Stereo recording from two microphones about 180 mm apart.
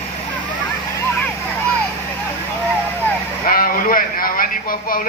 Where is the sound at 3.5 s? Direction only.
50° left (ahead or behind).